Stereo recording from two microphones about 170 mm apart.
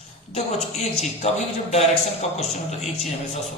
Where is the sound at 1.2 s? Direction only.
40° left (ahead or behind).